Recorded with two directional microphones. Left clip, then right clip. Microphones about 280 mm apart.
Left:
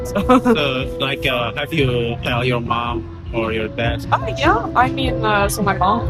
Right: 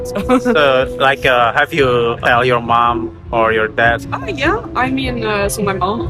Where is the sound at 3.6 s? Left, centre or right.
Right.